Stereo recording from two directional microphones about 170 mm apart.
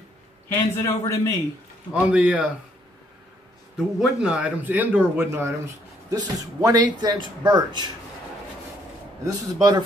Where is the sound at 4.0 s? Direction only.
5° right (ahead or behind); by 7.9 s 25° right (ahead or behind).